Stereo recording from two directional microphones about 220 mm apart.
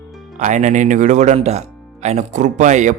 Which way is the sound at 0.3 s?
35° right (ahead or behind).